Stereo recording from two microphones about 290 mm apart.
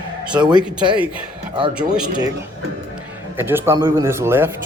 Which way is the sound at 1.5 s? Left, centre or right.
Centre.